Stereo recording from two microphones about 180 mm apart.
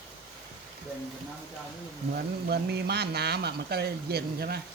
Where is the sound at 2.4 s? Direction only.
65° right (ahead or behind).